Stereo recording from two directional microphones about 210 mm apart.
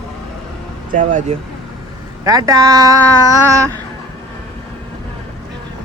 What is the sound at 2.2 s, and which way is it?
Speech, 15° right (ahead or behind).